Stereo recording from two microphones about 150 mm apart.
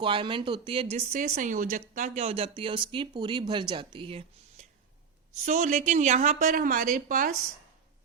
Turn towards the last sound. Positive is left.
turn(degrees=-60)  # may be behind; listen again after turning